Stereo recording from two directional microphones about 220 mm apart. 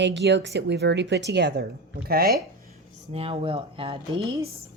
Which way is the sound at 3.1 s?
25° right (ahead or behind).